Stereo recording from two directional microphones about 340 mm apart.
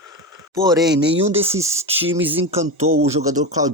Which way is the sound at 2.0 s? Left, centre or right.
Centre.